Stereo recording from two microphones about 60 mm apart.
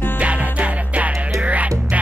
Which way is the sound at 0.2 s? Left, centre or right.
Right.